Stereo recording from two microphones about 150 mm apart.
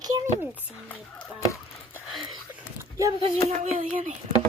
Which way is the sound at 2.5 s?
20° right (ahead or behind).